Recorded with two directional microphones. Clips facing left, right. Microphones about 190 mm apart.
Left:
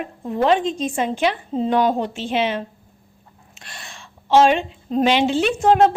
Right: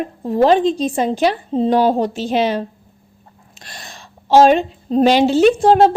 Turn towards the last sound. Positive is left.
turn(degrees=-35)  # may be behind; listen again after turning